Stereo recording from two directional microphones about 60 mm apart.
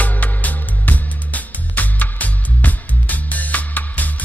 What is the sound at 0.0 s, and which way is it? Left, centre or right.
Music, left.